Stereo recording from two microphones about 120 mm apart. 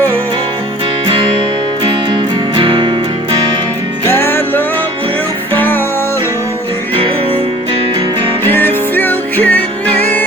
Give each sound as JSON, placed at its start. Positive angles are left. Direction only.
{"t": 1.8, "sound": "music", "side_deg": -45}
{"t": 4.1, "sound": "music", "side_deg": 20}
{"t": 8.4, "sound": "music", "side_deg": 20}